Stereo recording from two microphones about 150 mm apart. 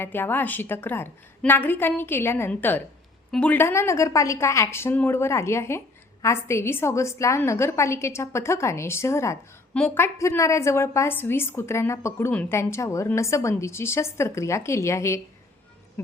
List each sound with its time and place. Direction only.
0.0 s a woman's voice: 15° left (ahead or behind)